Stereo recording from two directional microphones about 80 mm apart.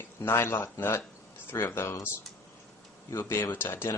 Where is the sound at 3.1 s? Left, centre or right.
Left.